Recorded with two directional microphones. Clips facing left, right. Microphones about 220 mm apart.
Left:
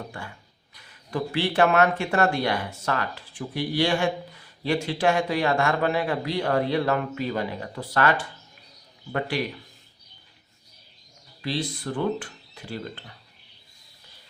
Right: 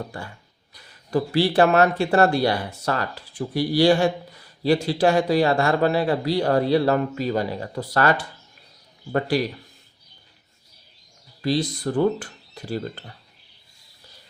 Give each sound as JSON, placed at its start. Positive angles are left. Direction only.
{"t": 0.7, "sound": "a man's voice", "side_deg": -35}
{"t": 9.1, "sound": "a man's voice", "side_deg": -35}
{"t": 11.4, "sound": "a man's voice", "side_deg": -40}